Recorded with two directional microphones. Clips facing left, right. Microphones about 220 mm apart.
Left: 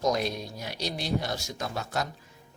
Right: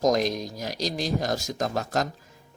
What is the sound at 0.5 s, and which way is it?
Speech, 40° right (ahead or behind).